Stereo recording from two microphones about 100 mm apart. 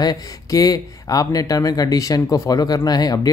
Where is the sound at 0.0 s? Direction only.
40° left (ahead or behind).